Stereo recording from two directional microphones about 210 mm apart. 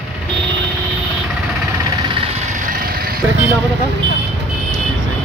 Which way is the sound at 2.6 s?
45° right (ahead or behind).